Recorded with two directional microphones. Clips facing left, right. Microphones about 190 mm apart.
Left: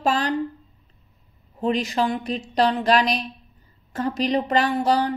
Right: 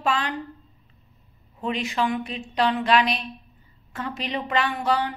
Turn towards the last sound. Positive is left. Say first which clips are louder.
# left 4 dB
turn(degrees=40)  # may be behind; listen again after turning